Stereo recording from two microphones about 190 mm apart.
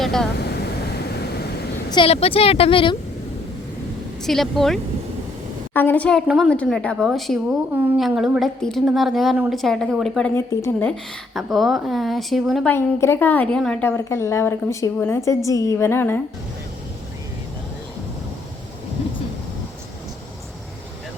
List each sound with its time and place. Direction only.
0.0 s vehicle: centre (ahead or behind)
1.9 s speech: 30° left (ahead or behind)
4.2 s a woman's voice: centre (ahead or behind)
11.3 s a woman's voice: centre (ahead or behind)
12.7 s a woman's voice: 10° left (ahead or behind)